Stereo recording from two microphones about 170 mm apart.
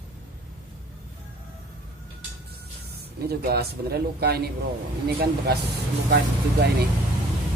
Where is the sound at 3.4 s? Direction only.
70° right (ahead or behind).